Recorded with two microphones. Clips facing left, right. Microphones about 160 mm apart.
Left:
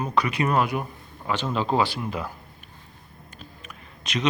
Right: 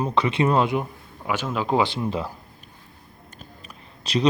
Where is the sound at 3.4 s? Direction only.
35° right (ahead or behind).